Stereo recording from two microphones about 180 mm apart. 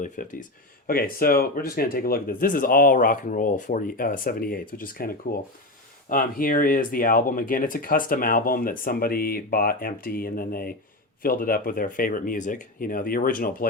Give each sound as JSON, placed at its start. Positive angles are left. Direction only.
{"t": 0.0, "sound": "speech", "side_deg": 45}